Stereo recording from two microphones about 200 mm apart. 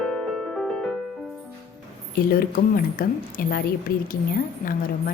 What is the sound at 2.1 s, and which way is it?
A woman's voice, 45° left (ahead or behind).